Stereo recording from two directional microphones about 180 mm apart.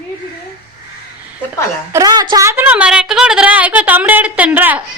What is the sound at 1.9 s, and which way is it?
Speech, 20° right (ahead or behind).